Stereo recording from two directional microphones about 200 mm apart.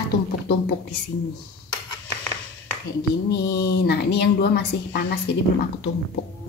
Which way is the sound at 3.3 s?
55° left (ahead or behind).